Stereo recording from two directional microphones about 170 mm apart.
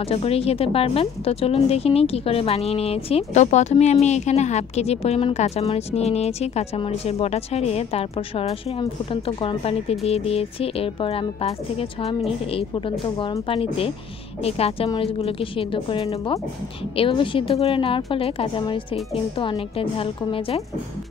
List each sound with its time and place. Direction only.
0.1 s speech: 35° left (ahead or behind)